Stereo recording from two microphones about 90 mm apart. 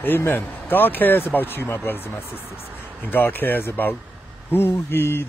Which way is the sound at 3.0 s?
25° left (ahead or behind).